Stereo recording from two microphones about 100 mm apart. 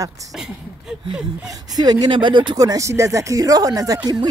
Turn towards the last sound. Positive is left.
turn(degrees=-40)  # may be behind; listen again after turning